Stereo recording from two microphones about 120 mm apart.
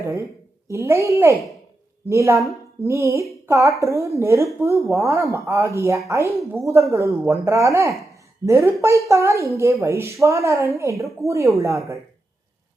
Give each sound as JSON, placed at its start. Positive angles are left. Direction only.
{"t": 0.0, "sound": "a woman's voice", "side_deg": -25}